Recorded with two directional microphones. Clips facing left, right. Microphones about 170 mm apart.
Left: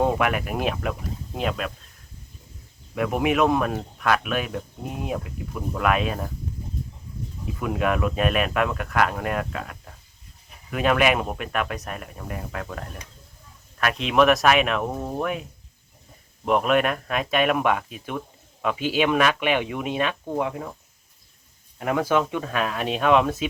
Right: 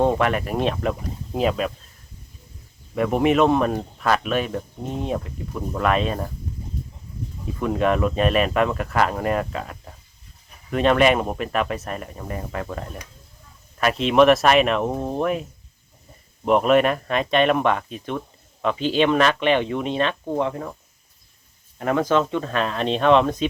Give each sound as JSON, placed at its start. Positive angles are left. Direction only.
{"t": 0.0, "sound": "speech", "side_deg": 5}
{"t": 2.9, "sound": "speech", "side_deg": 0}
{"t": 7.6, "sound": "speech", "side_deg": 5}
{"t": 14.9, "sound": "speech", "side_deg": -20}
{"t": 15.2, "sound": "speech", "side_deg": 0}
{"t": 16.5, "sound": "speech", "side_deg": 0}
{"t": 21.8, "sound": "speech", "side_deg": 10}